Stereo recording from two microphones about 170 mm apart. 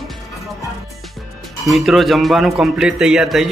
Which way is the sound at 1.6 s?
Centre (ahead or behind).